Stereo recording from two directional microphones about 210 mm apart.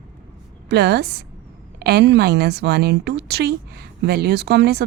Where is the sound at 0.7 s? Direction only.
50° right (ahead or behind).